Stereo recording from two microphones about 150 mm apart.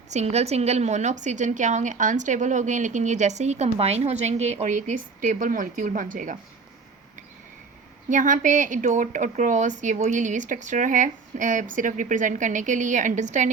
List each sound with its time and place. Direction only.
0.1 s a woman's voice: 45° right (ahead or behind)
8.1 s a woman's voice: 60° right (ahead or behind)